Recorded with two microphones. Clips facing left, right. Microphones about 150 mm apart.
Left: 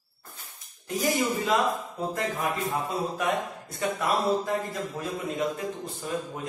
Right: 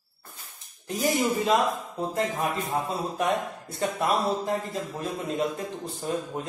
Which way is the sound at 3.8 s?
35° right (ahead or behind).